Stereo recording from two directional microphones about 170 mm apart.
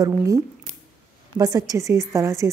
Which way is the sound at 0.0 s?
20° right (ahead or behind).